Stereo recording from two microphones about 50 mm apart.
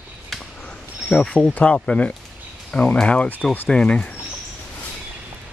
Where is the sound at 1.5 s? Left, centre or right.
Left.